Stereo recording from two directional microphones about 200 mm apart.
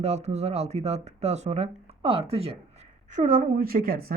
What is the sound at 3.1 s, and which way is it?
A woman's voice, 40° right (ahead or behind).